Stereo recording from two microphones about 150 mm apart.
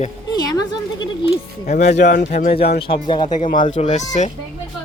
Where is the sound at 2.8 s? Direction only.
35° left (ahead or behind).